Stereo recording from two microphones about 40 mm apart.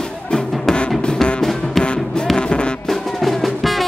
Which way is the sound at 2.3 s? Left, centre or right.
Left.